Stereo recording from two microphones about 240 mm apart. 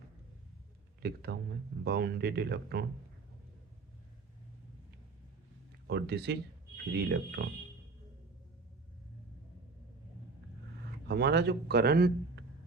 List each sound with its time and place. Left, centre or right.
1.0 s speech: right
5.9 s speech: right
11.1 s speech: right